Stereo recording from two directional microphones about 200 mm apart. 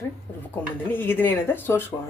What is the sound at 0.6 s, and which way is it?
Speech, 10° left (ahead or behind).